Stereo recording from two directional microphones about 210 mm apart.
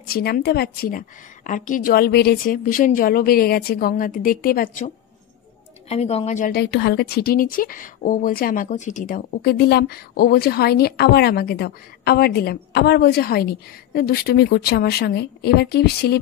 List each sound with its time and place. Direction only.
0.1 s speech: 45° left (ahead or behind)
5.9 s a woman's voice: 30° left (ahead or behind)
6.6 s speech: 55° left (ahead or behind)